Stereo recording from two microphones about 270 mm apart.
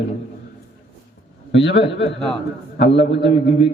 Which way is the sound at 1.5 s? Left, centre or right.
Left.